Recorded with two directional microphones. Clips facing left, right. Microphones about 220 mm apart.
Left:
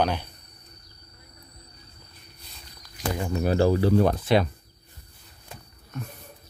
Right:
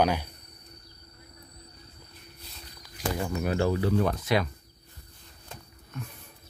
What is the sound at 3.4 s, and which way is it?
Speech, 35° left (ahead or behind).